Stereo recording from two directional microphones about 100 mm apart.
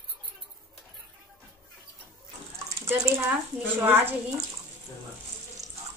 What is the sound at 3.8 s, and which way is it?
Speech, 20° right (ahead or behind).